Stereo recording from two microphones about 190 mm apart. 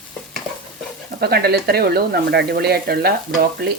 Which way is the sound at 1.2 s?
55° right (ahead or behind).